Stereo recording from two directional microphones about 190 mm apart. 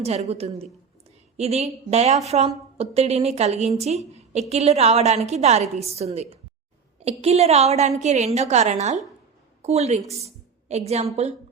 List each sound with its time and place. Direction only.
0.0 s a woman's voice: 35° right (ahead or behind)